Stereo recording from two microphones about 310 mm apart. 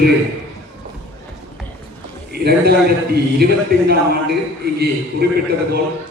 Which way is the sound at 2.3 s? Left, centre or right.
Right.